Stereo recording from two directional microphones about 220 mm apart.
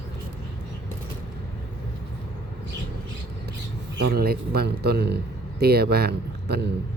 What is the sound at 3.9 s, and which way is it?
A man's voice, 45° right (ahead or behind).